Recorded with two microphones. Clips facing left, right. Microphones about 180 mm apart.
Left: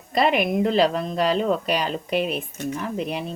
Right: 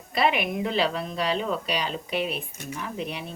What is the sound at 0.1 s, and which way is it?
Speech, 45° left (ahead or behind).